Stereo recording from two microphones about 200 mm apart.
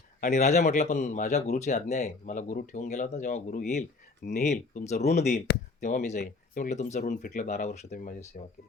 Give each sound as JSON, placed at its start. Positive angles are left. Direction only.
{"t": 0.2, "sound": "a man's voice", "side_deg": 35}